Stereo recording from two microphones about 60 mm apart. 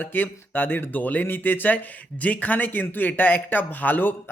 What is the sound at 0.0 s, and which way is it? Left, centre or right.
A man's voice, left.